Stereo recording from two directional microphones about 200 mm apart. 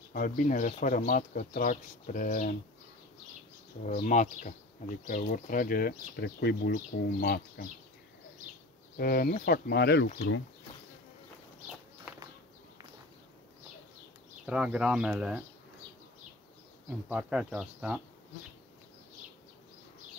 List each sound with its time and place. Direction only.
0.1 s speech: 40° left (ahead or behind)
3.8 s speech: 40° left (ahead or behind)
8.9 s speech: 50° left (ahead or behind)
14.4 s speech: 5° right (ahead or behind)
17.1 s speech: 5° right (ahead or behind)